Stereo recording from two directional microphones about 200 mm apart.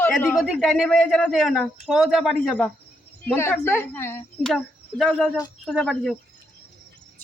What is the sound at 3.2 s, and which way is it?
Speech, 10° left (ahead or behind).